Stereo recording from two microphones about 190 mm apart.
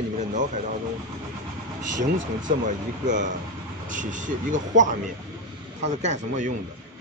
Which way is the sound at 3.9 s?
40° right (ahead or behind).